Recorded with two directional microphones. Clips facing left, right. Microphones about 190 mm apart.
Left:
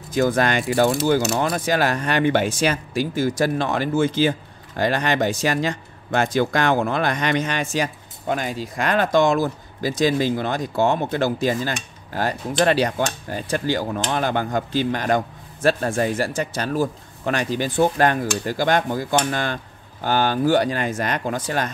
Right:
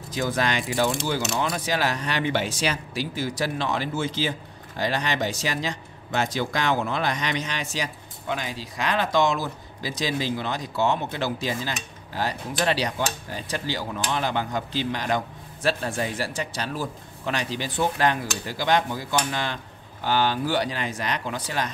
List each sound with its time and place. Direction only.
0.1 s speech: 50° left (ahead or behind)